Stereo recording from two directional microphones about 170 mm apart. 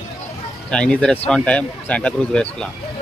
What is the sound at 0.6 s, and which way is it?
Speech, 5° left (ahead or behind).